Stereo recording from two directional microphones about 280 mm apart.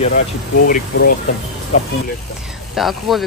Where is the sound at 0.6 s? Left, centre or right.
Left.